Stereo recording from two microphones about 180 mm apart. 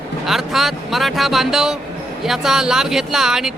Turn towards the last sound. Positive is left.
turn(degrees=-5)  # may be behind; listen again after turning